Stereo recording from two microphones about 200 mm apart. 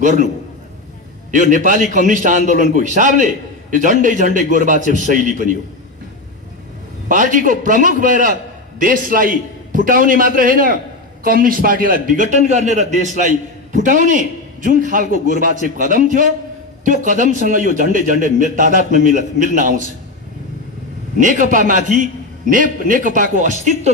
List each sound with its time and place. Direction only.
0.0 s a man's voice: 40° right (ahead or behind)
1.3 s a man's voice: 40° right (ahead or behind)
7.1 s a man's voice: 40° right (ahead or behind)
21.2 s a man's voice: 40° right (ahead or behind)